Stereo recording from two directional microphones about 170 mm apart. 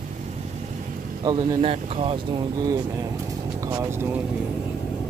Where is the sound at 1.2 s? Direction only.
25° right (ahead or behind).